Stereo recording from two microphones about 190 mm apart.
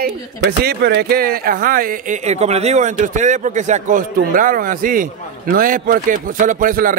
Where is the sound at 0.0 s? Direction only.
55° right (ahead or behind).